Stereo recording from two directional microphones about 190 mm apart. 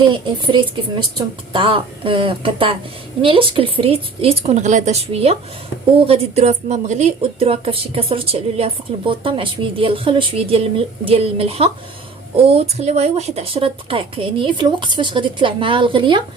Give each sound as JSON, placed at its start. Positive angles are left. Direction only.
{"t": 0.3, "sound": "a woman's voice", "side_deg": -25}